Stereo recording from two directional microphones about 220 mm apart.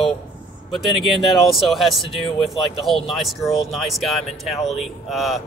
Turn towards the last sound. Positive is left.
turn(degrees=0)  # may be behind; listen again after turning